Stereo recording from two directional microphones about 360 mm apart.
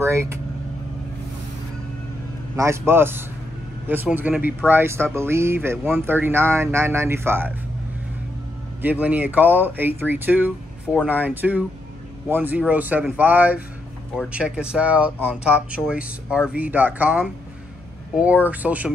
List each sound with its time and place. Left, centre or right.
0.0 s speech: centre
2.5 s speech: centre
8.8 s speech: centre